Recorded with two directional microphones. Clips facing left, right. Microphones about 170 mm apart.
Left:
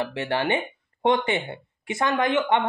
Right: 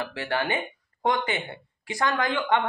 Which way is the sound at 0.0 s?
25° left (ahead or behind).